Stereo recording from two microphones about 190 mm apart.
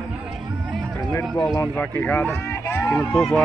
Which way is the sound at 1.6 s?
10° left (ahead or behind).